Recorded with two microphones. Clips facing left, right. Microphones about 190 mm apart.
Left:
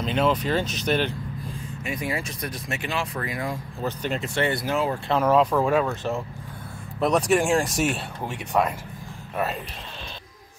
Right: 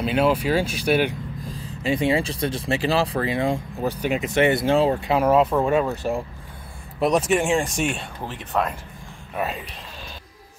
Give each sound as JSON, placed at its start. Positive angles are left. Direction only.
{"t": 0.0, "sound": "speech", "side_deg": -5}
{"t": 1.5, "sound": "speech", "side_deg": -30}
{"t": 3.8, "sound": "speech", "side_deg": -10}
{"t": 5.0, "sound": "speech", "side_deg": -10}
{"t": 5.9, "sound": "speech", "side_deg": -15}